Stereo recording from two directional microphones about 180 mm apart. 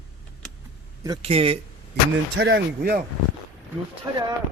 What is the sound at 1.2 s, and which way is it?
Speech, 35° right (ahead or behind).